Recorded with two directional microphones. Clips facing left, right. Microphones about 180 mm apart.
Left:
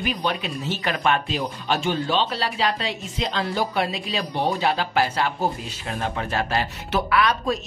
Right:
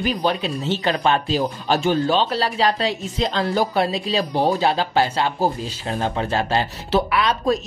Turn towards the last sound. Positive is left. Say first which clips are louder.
# right 2 dB
turn(degrees=-25)  # may be behind; listen again after turning